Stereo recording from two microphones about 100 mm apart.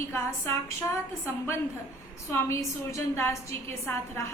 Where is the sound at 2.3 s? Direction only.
30° left (ahead or behind).